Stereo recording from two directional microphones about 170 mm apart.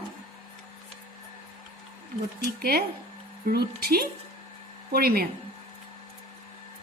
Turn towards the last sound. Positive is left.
turn(degrees=-65)  # may be behind; listen again after turning